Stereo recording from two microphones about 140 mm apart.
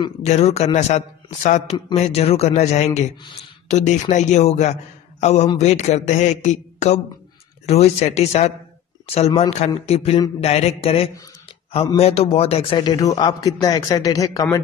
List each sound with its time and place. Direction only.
0.2 s a man's voice: 55° left (ahead or behind); by 14.6 s 25° left (ahead or behind)